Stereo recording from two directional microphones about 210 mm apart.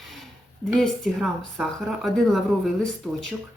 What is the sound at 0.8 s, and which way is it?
Speech, centre (ahead or behind).